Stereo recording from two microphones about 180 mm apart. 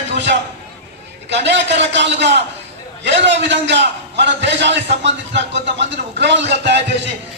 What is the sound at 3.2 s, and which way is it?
A man's voice, 80° right.